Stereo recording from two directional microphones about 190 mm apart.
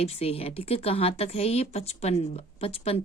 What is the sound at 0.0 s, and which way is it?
A woman's voice, 30° left (ahead or behind).